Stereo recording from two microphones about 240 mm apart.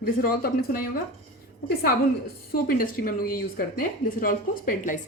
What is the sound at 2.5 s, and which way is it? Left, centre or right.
A woman's voice, left.